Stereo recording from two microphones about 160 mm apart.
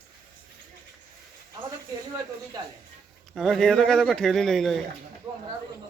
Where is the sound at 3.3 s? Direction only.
Centre (ahead or behind).